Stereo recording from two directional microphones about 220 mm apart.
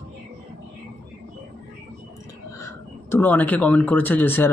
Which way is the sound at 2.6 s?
10° left (ahead or behind).